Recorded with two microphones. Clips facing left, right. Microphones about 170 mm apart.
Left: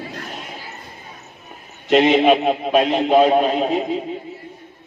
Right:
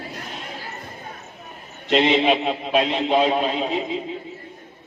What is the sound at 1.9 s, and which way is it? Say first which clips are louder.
A man's voice: left 4 dB; 45° left (ahead or behind).